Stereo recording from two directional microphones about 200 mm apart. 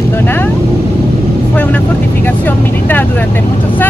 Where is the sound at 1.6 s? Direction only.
10° left (ahead or behind).